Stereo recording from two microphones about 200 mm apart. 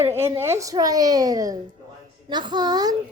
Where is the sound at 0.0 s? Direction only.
15° right (ahead or behind).